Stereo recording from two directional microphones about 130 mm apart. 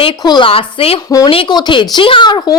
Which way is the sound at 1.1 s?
25° left (ahead or behind).